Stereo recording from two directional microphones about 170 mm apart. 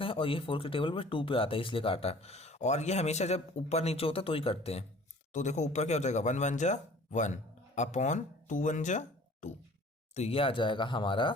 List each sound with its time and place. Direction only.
0.0 s speech: 30° left (ahead or behind)